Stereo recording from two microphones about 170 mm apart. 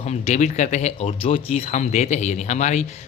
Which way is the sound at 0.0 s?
40° left (ahead or behind).